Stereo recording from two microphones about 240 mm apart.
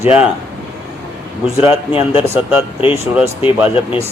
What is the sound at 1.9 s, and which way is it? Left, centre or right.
Speech, left.